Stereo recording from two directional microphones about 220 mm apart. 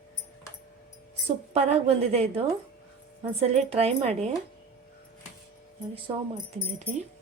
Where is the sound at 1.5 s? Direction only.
30° right (ahead or behind).